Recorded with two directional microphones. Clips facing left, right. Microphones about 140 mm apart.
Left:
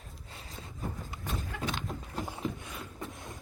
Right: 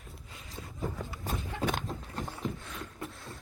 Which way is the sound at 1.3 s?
35° right (ahead or behind).